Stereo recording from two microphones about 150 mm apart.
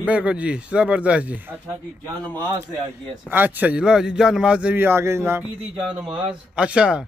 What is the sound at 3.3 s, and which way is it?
Speech, 10° right (ahead or behind).